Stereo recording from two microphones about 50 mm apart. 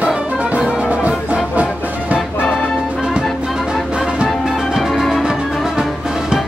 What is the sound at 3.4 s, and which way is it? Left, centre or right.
Music, centre.